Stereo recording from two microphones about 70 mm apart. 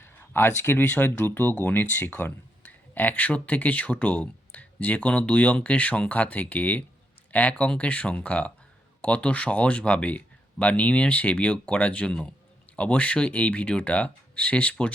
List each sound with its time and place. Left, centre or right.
0.0 s speech: left; by 14.9 s centre